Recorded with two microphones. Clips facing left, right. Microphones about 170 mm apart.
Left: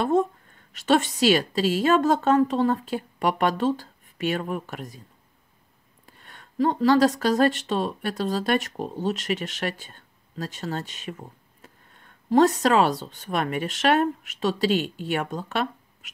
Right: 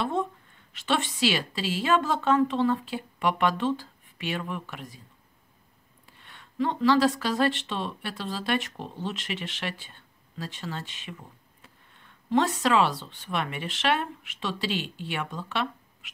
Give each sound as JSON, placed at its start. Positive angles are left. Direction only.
{"t": 0.0, "sound": "a woman's voice", "side_deg": 45}
{"t": 6.0, "sound": "speech", "side_deg": 45}